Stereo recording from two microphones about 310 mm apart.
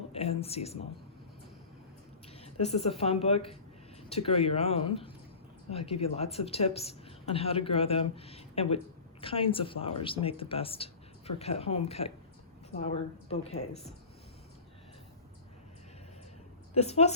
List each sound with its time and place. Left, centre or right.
0.1 s a woman's voice: centre
2.4 s a sound: centre
3.0 s a woman's voice: centre
16.7 s a woman's voice: left